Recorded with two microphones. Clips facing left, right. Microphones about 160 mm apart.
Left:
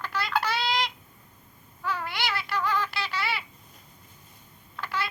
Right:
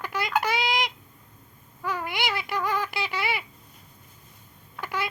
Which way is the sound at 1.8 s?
15° right (ahead or behind).